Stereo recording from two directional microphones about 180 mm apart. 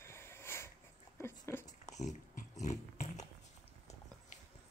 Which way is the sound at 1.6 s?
40° left (ahead or behind).